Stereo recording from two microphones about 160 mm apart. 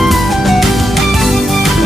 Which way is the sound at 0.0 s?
Centre (ahead or behind).